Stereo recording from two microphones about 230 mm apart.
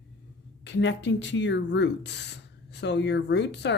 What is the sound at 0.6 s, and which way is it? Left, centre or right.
Speech, left.